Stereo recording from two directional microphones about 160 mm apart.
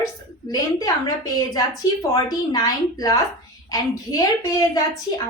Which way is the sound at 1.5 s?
25° left (ahead or behind).